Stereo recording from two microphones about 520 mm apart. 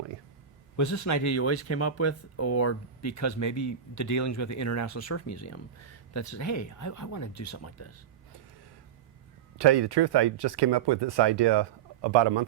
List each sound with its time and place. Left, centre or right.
0.8 s speech: left
9.6 s speech: right